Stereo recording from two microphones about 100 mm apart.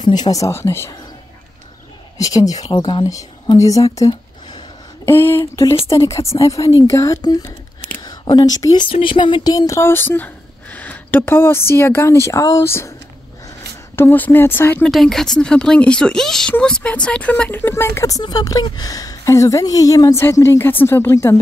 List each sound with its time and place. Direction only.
0.0 s a woman's voice: 45° left (ahead or behind); by 0.9 s 25° left (ahead or behind)
2.1 s a woman's voice: 35° left (ahead or behind); by 3.1 s 50° left (ahead or behind)
3.1 s speech: 35° left (ahead or behind)
4.1 s a sound: 50° left (ahead or behind)
5.0 s a sound: 25° left (ahead or behind)
5.4 s a woman's voice: 35° left (ahead or behind)
8.8 s speech: 60° left (ahead or behind)
9.5 s speech: 35° left (ahead or behind)
13.9 s speech: 20° left (ahead or behind)
14.9 s a woman's voice: centre (ahead or behind); by 21.4 s 30° left (ahead or behind)